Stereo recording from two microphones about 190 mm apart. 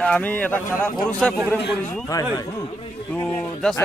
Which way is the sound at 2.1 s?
20° left (ahead or behind).